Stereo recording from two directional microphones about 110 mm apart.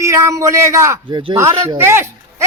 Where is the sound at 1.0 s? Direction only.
45° right (ahead or behind).